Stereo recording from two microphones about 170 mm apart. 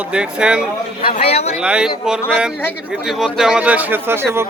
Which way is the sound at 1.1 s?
40° left (ahead or behind).